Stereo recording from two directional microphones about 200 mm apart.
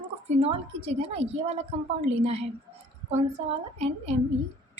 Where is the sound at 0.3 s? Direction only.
30° right (ahead or behind).